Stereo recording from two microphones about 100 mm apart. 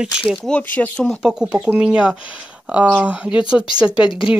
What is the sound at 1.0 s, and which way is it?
Speech, centre (ahead or behind).